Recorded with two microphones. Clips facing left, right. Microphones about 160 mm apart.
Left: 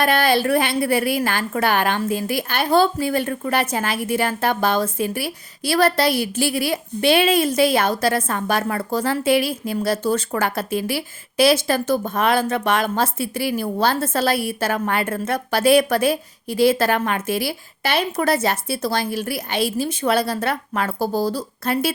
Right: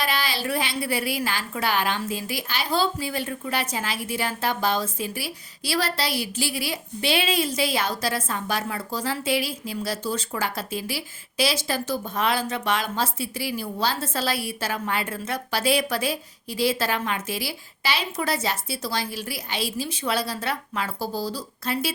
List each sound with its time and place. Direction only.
0.0 s a woman's voice: 55° left (ahead or behind)